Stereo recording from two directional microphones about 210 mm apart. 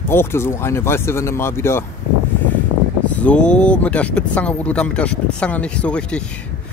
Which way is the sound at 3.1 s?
5° left (ahead or behind).